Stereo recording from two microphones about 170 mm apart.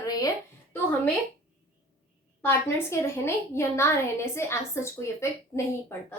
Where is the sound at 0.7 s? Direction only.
10° left (ahead or behind).